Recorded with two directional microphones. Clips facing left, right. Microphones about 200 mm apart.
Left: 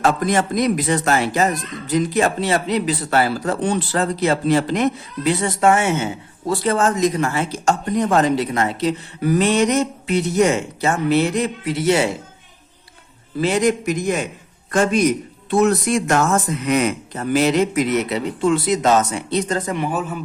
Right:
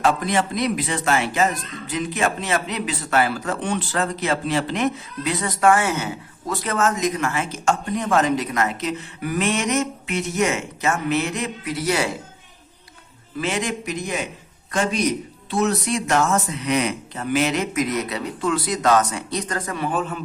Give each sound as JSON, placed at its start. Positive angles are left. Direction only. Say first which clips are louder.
{"t": 0.0, "sound": "a man's voice", "louder": "left 2 dB", "side_deg": 45}
{"t": 13.4, "sound": "a man's voice", "louder": "left 8 dB", "side_deg": 40}
{"t": 15.4, "sound": "speech", "louder": "left 5 dB", "side_deg": 50}
{"t": 19.9, "sound": "a man's voice", "louder": "left 1 dB", "side_deg": 5}